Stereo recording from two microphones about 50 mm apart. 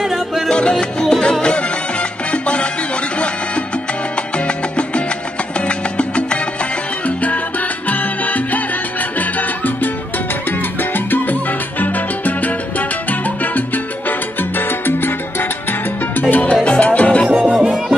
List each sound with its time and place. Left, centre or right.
0.5 s music: centre
2.3 s music: left
5.7 s music: left
10.8 s salsa music: left
14.9 s salsa music: left
16.2 s salsa music: left
16.6 s music: left
17.3 s music: right
17.6 s music: centre